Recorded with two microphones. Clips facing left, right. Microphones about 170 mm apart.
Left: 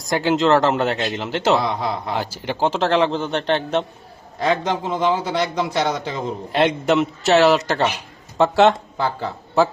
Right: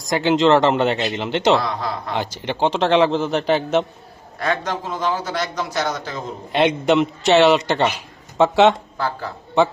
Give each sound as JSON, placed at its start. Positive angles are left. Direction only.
{"t": 0.0, "sound": "a man's voice", "side_deg": 5}
{"t": 1.6, "sound": "speech", "side_deg": 20}
{"t": 2.0, "sound": "a man's voice", "side_deg": 5}
{"t": 4.4, "sound": "speech", "side_deg": 20}
{"t": 6.5, "sound": "a man's voice", "side_deg": 0}
{"t": 9.0, "sound": "speech", "side_deg": 20}
{"t": 9.6, "sound": "a man's voice", "side_deg": 0}